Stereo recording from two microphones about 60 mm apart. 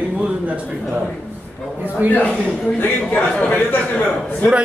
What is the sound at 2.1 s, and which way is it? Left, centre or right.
A man's voice, left.